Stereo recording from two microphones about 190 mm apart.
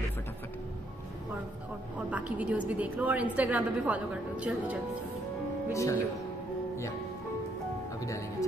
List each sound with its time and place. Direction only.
2.0 s a woman's voice: 5° right (ahead or behind)
5.7 s speech: 15° left (ahead or behind)
8.0 s music: 15° left (ahead or behind)